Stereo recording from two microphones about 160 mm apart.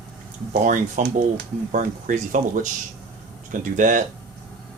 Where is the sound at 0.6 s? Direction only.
50° right (ahead or behind).